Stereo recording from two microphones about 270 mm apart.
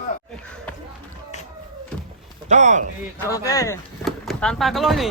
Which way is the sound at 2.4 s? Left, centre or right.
Right.